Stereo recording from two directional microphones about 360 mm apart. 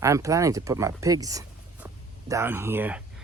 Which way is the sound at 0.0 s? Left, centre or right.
Centre.